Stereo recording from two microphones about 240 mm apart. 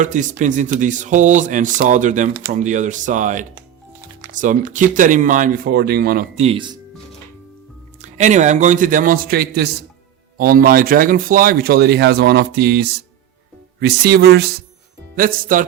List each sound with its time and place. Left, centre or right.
0.0 s a man's voice: right
8.0 s a man's voice: right